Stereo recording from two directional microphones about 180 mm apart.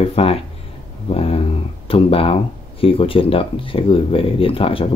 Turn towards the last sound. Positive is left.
turn(degrees=30)  # may be behind; listen again after turning